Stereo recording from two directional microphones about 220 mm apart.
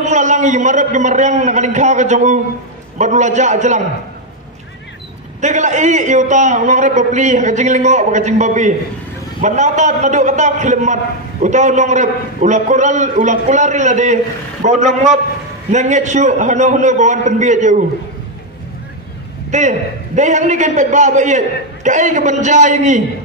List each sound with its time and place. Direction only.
0.0 s a man's voice: 35° right (ahead or behind)
5.4 s a man's voice: 35° right (ahead or behind)
20.2 s a man's voice: 35° right (ahead or behind)